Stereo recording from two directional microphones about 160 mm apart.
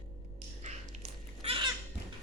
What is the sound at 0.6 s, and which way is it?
Cat, 45° right (ahead or behind).